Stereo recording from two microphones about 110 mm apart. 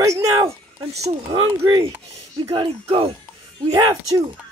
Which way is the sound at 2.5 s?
50° right (ahead or behind).